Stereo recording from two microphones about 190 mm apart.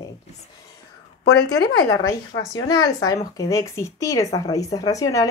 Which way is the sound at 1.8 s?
15° left (ahead or behind).